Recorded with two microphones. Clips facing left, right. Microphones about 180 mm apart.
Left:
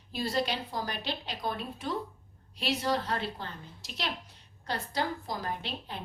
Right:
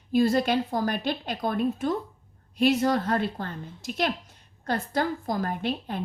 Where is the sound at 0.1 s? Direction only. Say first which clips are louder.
Right 9 dB; 50° right (ahead or behind).